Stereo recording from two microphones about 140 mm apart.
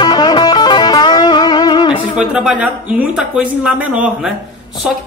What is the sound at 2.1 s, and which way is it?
Speech, 5° right (ahead or behind).